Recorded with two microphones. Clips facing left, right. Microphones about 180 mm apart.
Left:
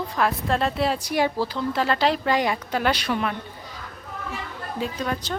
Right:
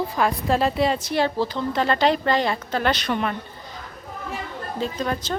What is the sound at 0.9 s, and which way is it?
Speech, 10° left (ahead or behind).